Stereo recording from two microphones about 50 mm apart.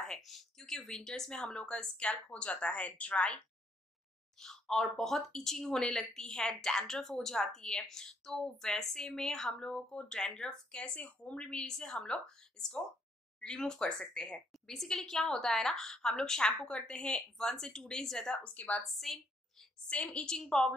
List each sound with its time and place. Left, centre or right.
0.0 s speech: centre; by 3.3 s left
4.4 s speech: centre
18.4 s a woman's voice: left
18.9 s a woman's voice: centre
19.9 s speech: left